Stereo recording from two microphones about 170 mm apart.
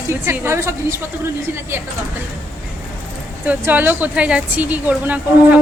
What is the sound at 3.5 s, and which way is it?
A woman's voice, 10° right (ahead or behind).